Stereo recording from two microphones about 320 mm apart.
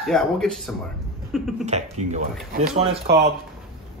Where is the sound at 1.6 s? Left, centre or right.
Right.